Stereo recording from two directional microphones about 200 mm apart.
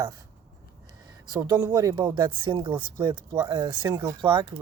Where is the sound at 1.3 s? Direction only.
20° right (ahead or behind).